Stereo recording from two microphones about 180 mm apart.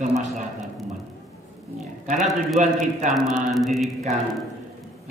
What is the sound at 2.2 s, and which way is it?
A man's voice, centre (ahead or behind).